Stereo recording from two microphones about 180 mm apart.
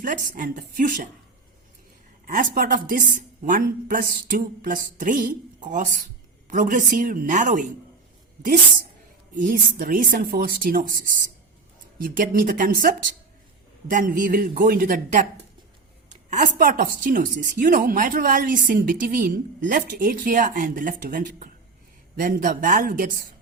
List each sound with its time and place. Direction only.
0.0 s speech: 50° right (ahead or behind)
2.2 s speech: 50° right (ahead or behind)
9.3 s speech: 50° right (ahead or behind)
13.9 s speech: 50° right (ahead or behind)
16.0 s a sound: 45° right (ahead or behind)
17.0 s speech: 50° right (ahead or behind)